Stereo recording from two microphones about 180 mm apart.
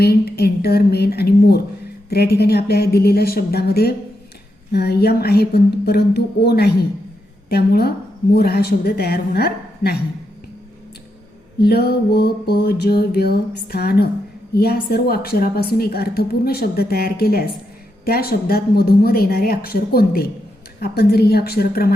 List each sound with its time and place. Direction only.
0.0 s a woman's voice: 60° left (ahead or behind)
11.6 s a woman's voice: 60° left (ahead or behind)